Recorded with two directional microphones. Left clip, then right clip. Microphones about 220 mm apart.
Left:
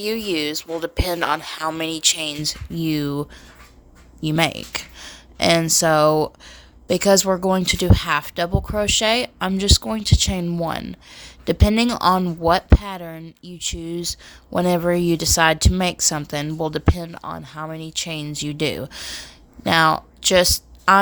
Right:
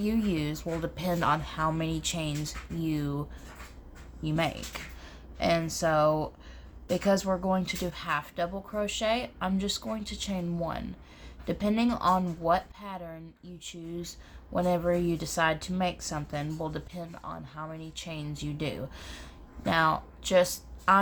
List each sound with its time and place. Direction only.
0.0 s speech: 45° left (ahead or behind)